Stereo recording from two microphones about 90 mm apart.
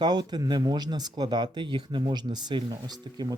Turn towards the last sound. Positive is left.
turn(degrees=-65)  # may be behind; listen again after turning